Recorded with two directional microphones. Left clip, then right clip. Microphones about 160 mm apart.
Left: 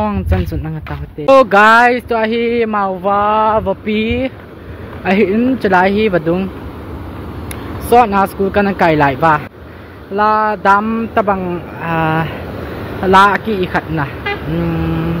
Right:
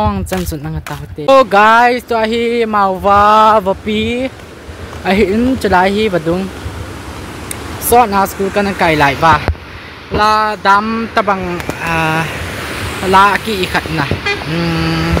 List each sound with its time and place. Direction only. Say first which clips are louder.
0.0 s speech: right 2 dB; 25° right (ahead or behind)
2.9 s a sound: right 5 dB; 45° right (ahead or behind)
3.9 s speech: even; 25° right (ahead or behind)
7.9 s speech: even; 20° right (ahead or behind)